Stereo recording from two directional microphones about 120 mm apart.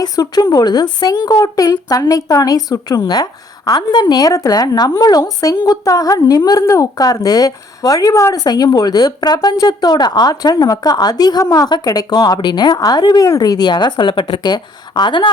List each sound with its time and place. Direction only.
0.0 s a woman's voice: 35° left (ahead or behind)